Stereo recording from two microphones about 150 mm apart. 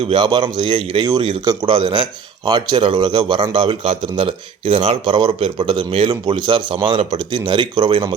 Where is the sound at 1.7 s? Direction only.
35° right (ahead or behind).